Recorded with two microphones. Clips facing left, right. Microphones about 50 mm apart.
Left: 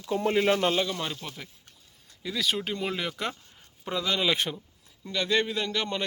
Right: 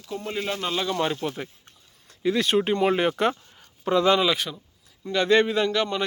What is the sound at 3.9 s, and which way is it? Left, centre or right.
Speech, right.